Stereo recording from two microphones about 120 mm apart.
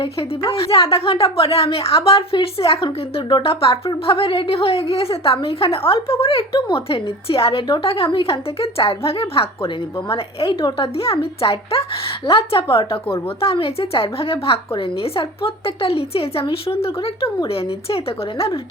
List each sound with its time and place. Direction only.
0.0 s speech: 50° left (ahead or behind)